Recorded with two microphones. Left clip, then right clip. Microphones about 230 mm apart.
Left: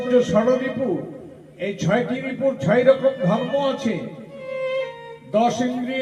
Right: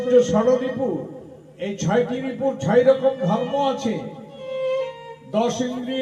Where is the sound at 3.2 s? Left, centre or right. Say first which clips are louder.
Even; right.